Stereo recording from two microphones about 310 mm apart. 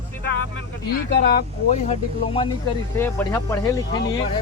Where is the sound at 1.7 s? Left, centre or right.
Centre.